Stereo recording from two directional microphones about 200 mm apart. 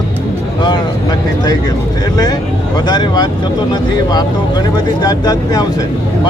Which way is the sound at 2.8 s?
20° left (ahead or behind).